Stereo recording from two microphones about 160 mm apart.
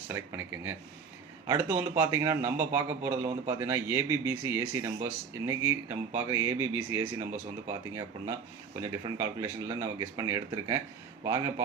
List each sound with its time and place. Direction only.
0.1 s speech: 15° right (ahead or behind)